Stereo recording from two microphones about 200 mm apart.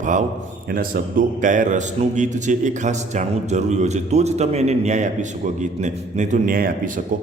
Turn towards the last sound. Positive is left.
turn(degrees=-45)  # may be behind; listen again after turning